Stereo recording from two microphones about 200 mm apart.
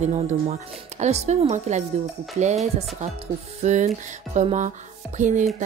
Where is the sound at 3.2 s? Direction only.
35° right (ahead or behind).